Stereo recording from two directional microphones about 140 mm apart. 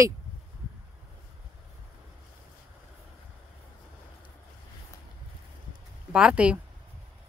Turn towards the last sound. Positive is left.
turn(degrees=-5)  # may be behind; listen again after turning